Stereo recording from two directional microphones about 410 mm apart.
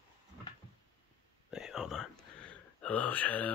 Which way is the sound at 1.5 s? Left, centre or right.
Centre.